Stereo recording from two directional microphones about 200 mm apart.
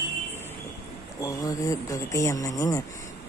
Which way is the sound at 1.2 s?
15° left (ahead or behind).